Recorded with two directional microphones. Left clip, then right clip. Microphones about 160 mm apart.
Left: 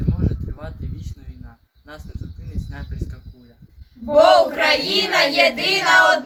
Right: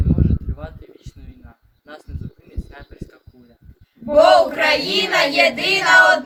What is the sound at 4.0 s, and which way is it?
Speech, 10° right (ahead or behind).